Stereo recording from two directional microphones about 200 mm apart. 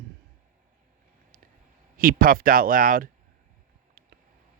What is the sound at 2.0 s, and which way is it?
Speech, 45° right (ahead or behind).